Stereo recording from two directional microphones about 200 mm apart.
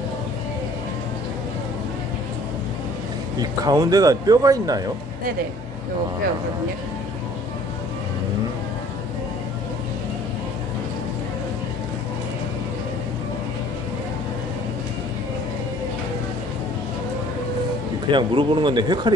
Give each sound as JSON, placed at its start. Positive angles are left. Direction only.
{"t": 3.3, "sound": "speech", "side_deg": -20}
{"t": 18.1, "sound": "speech", "side_deg": -25}